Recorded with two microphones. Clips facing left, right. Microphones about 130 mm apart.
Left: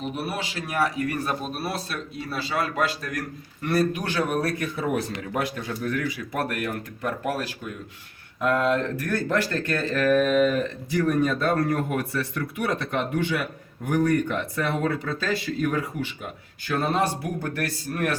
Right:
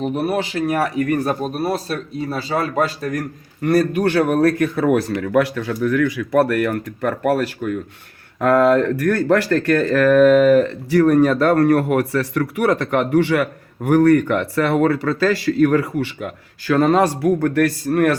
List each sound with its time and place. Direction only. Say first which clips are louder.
0.2 s speech: right 10 dB; 50° right (ahead or behind)
8.4 s speech: right 9 dB; 70° right (ahead or behind)